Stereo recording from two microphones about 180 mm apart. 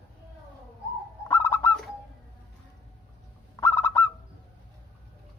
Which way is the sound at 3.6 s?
15° left (ahead or behind).